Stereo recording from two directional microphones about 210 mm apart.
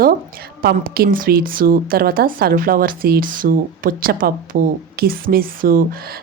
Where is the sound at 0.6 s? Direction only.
45° right (ahead or behind).